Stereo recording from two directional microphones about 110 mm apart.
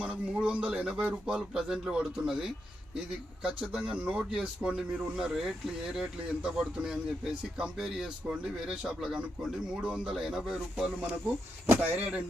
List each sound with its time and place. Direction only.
0.0 s a man's voice: 10° right (ahead or behind)